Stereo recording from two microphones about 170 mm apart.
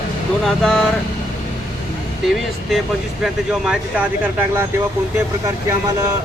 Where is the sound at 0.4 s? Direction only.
5° left (ahead or behind).